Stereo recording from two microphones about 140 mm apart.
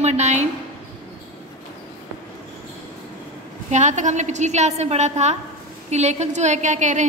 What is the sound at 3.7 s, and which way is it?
A woman's voice, 60° right (ahead or behind).